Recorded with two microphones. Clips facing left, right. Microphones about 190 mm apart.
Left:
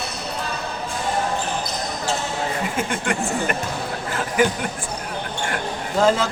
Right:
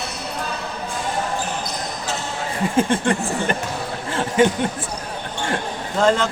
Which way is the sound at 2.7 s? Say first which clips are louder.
Right 5 dB; 30° right (ahead or behind).